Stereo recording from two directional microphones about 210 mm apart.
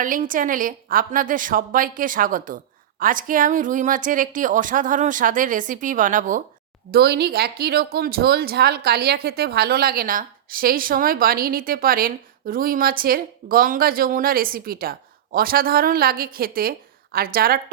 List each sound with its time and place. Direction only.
0.0 s a woman's voice: 40° right (ahead or behind)